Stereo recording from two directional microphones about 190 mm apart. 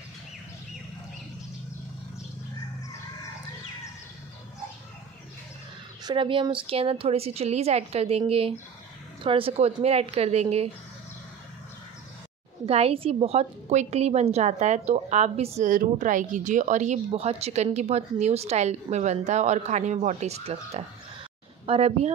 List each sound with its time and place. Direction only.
6.0 s a woman's voice: 25° right (ahead or behind)
12.6 s a woman's voice: 30° right (ahead or behind)